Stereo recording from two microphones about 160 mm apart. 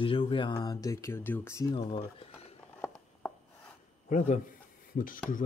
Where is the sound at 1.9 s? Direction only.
40° left (ahead or behind).